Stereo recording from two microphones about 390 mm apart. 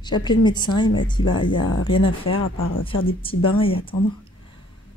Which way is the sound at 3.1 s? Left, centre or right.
Centre.